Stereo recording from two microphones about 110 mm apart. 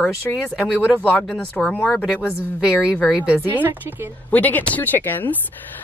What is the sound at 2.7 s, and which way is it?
Speech, 10° right (ahead or behind).